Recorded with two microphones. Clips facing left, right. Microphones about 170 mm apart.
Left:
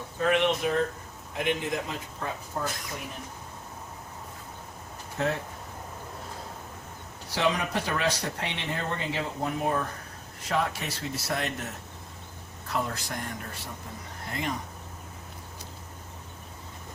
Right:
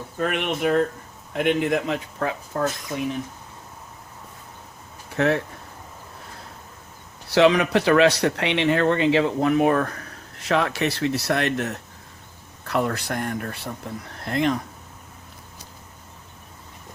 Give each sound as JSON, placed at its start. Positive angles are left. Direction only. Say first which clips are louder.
{"t": 0.2, "sound": "speech", "louder": "right 1 dB", "side_deg": -60}
{"t": 2.5, "sound": "speech", "louder": "right 8 dB", "side_deg": -90}
{"t": 5.1, "sound": "speech", "louder": "right 8 dB", "side_deg": -75}
{"t": 7.3, "sound": "speech", "louder": "right 10 dB", "side_deg": -75}
{"t": 14.2, "sound": "speech", "louder": "right 10 dB", "side_deg": -80}